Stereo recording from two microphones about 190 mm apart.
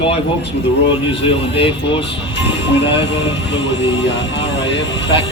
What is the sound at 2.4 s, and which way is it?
Speech, 65° left (ahead or behind).